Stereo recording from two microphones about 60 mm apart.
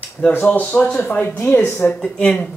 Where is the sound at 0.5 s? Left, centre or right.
Left.